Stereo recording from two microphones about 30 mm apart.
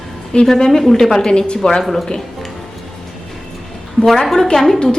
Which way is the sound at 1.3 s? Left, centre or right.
Left.